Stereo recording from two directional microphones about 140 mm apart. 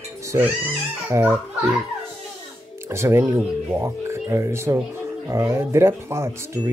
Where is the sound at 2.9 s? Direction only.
20° right (ahead or behind).